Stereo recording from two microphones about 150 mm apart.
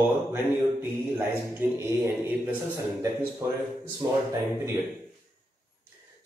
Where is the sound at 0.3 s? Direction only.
15° right (ahead or behind).